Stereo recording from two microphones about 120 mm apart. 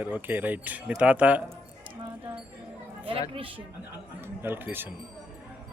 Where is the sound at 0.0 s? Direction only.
15° right (ahead or behind).